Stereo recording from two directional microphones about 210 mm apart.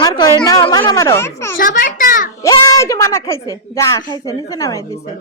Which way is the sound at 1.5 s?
40° left (ahead or behind).